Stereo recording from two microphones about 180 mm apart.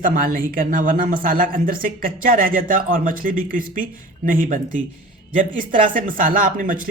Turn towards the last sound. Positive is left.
turn(degrees=-50)  # may be behind; listen again after turning